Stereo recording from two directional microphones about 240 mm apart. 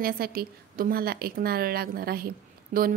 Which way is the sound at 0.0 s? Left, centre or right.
Right.